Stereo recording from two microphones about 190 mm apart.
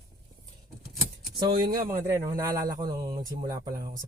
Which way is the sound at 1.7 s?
15° right (ahead or behind).